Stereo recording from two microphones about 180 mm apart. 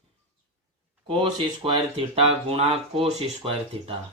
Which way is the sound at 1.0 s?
30° right (ahead or behind).